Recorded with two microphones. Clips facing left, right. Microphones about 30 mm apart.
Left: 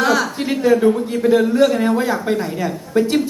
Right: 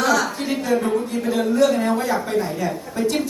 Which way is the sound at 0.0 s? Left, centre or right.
Left.